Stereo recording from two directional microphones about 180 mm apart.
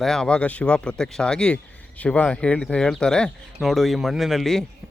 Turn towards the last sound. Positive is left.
turn(degrees=0)  # may be behind; listen again after turning